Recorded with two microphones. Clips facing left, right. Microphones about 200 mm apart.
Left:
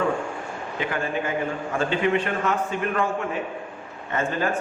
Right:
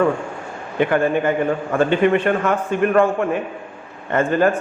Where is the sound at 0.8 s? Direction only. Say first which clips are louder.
Right 10 dB; 60° right (ahead or behind).